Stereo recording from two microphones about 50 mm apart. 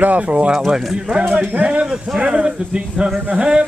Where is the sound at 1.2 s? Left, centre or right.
Right.